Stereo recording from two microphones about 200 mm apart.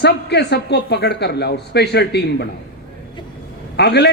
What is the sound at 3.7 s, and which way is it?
Speech, 55° left (ahead or behind).